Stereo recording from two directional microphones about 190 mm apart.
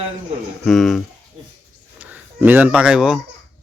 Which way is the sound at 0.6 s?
Centre (ahead or behind).